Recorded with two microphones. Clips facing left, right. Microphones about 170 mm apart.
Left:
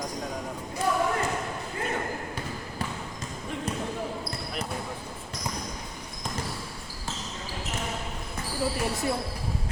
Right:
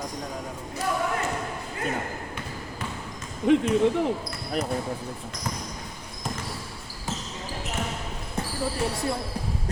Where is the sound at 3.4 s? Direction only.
80° right.